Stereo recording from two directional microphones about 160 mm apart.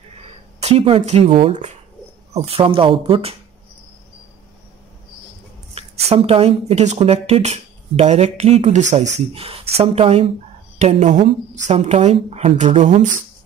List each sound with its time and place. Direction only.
0.6 s speech: 40° right (ahead or behind)
6.0 s speech: 35° right (ahead or behind)